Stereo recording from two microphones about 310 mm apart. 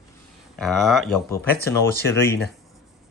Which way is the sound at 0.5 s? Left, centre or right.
Centre.